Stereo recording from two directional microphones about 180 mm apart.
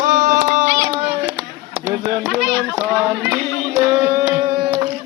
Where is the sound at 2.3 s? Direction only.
5° right (ahead or behind).